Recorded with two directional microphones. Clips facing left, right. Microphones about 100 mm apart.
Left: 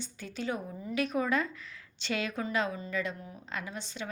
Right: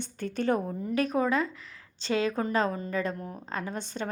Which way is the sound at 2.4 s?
45° right (ahead or behind).